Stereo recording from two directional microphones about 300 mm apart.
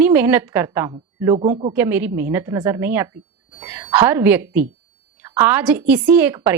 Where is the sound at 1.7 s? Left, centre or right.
Centre.